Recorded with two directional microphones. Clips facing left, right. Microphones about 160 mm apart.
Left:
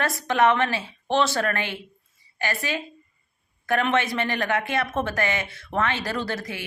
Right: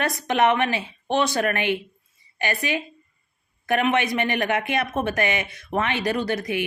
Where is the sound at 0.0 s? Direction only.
20° right (ahead or behind).